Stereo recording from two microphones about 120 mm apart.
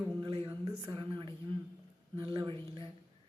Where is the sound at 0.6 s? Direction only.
35° right (ahead or behind).